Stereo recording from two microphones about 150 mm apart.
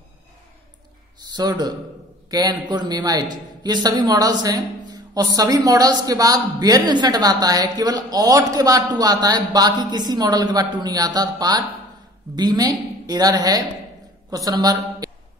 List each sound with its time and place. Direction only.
1.3 s speech: 25° right (ahead or behind)